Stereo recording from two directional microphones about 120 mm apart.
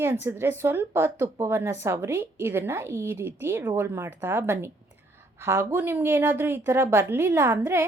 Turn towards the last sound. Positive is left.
turn(degrees=-20)  # may be behind; listen again after turning